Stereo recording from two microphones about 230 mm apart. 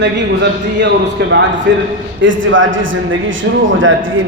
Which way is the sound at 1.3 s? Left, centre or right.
Right.